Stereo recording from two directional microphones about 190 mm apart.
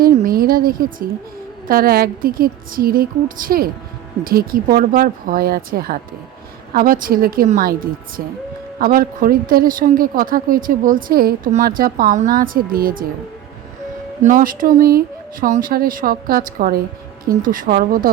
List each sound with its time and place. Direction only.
0.0 s a woman's voice: 50° right (ahead or behind)
14.2 s a woman's voice: 40° right (ahead or behind)